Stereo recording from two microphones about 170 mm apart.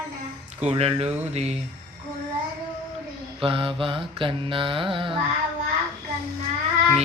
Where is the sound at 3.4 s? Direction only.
30° right (ahead or behind).